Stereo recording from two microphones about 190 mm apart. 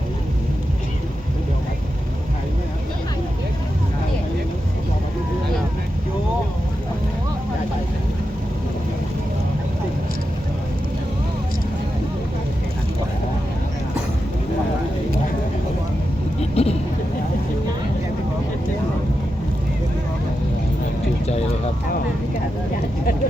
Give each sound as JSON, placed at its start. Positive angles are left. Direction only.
{"t": 16.4, "sound": "vehicle", "side_deg": 30}